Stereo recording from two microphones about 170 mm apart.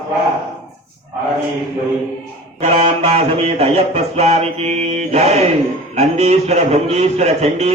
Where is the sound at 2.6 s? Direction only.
40° right (ahead or behind).